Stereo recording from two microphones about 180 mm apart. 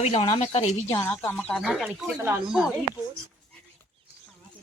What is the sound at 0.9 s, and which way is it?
Speech, 15° left (ahead or behind).